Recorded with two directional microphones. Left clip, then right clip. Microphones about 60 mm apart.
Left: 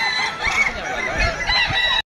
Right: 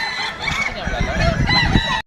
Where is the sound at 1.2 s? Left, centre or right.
Right.